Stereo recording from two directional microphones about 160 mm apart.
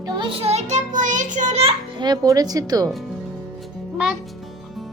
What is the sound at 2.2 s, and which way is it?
Speech, 25° right (ahead or behind).